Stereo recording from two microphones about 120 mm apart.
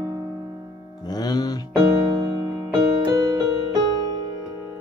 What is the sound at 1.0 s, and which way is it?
Music, 35° left (ahead or behind).